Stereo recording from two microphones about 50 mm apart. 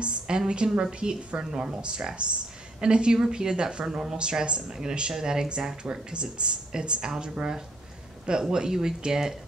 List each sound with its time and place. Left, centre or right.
0.0 s a woman's voice: right